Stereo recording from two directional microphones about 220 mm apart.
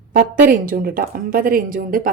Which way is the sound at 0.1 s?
40° right (ahead or behind).